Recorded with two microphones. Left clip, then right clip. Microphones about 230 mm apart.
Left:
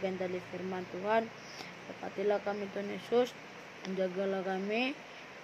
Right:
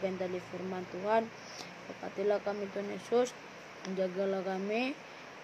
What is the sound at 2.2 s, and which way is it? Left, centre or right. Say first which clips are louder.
Speech: even; centre.